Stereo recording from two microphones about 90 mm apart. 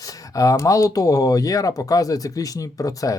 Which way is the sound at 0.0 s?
40° left (ahead or behind).